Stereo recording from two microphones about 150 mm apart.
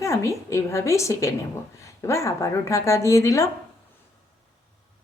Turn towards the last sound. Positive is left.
turn(degrees=20)  # may be behind; listen again after turning